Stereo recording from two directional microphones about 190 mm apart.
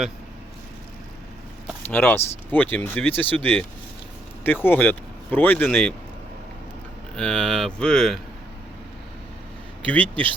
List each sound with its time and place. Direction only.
1.9 s speech: 10° left (ahead or behind)
4.6 s speech: 10° left (ahead or behind)
7.2 s speech: 5° left (ahead or behind)
9.8 s speech: 10° left (ahead or behind)